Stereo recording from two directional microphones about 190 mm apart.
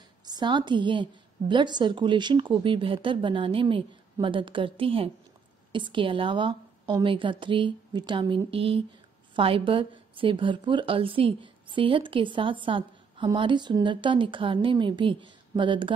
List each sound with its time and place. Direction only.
0.2 s a woman's voice: 20° right (ahead or behind)